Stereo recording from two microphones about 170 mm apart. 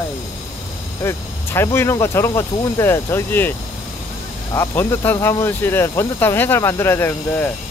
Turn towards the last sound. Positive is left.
turn(degrees=15)  # may be behind; listen again after turning